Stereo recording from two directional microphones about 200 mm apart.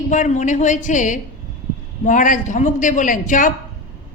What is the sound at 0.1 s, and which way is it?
A man's voice, 40° left (ahead or behind).